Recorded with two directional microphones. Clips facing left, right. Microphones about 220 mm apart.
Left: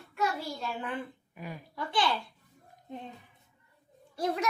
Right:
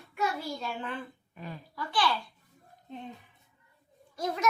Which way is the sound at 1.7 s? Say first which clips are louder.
Even; 20° left (ahead or behind).